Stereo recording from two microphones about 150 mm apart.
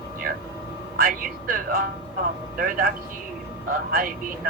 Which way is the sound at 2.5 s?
75° right (ahead or behind).